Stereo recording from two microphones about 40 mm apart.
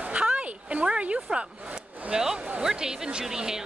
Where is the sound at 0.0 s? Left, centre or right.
Right.